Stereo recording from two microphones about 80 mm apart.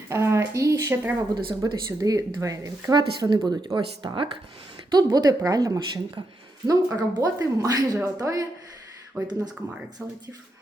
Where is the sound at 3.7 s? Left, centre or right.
Right.